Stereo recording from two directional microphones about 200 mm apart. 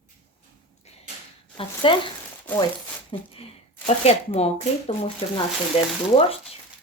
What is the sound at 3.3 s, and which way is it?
Speech, 30° left (ahead or behind).